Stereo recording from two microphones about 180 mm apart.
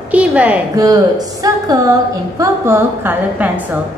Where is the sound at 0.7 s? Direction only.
20° right (ahead or behind).